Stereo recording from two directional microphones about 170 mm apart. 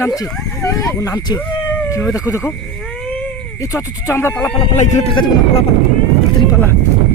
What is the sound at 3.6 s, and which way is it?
Speech, 20° left (ahead or behind).